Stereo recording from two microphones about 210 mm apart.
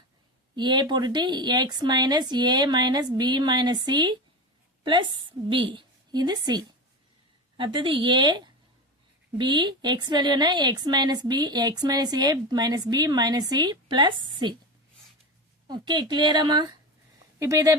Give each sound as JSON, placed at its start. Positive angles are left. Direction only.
{"t": 0.5, "sound": "a woman's voice", "side_deg": -20}
{"t": 15.6, "sound": "a woman's voice", "side_deg": -20}